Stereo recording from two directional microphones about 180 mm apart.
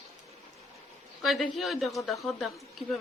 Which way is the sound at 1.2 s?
Centre (ahead or behind).